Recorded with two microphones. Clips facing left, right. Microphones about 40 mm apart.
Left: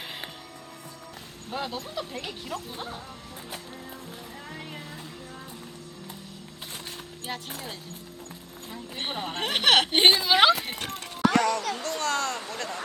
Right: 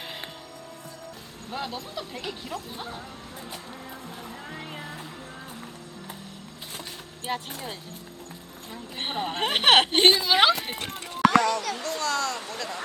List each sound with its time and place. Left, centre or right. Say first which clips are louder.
1.5 s speech: left 1 dB; centre
7.5 s speech: right 1 dB; centre
9.4 s speech: right 2 dB; right
9.9 s speech: even; centre
11.2 s a sound: right 3 dB; right
11.6 s speech: even; right
11.9 s speech: right 1 dB; left